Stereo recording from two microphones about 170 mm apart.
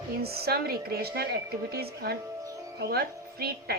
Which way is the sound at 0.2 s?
65° right (ahead or behind).